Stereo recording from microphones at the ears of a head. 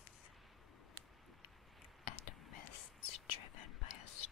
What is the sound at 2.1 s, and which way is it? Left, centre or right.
Whispering, left.